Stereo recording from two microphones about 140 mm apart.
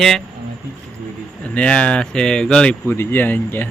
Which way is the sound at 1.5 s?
10° left (ahead or behind).